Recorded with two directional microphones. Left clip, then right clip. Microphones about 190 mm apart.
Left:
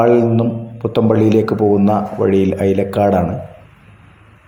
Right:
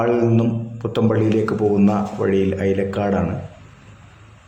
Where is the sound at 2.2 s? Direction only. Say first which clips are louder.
Left 4 dB; 15° left (ahead or behind).